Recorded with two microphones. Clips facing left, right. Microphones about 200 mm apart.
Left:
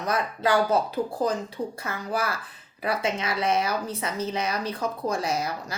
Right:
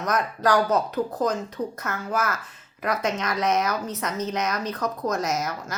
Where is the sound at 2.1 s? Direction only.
35° left (ahead or behind).